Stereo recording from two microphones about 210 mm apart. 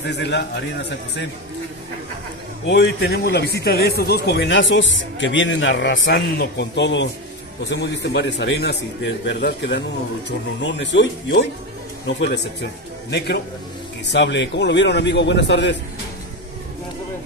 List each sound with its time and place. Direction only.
0.0 s a man's voice: 55° left (ahead or behind)
2.6 s a man's voice: 55° left (ahead or behind)
14.0 s a man's voice: 55° left (ahead or behind)